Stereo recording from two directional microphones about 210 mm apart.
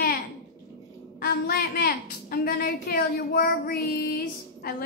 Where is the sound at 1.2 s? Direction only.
45° left (ahead or behind).